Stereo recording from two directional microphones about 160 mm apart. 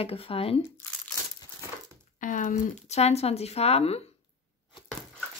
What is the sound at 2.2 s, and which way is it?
Speech, 55° left (ahead or behind).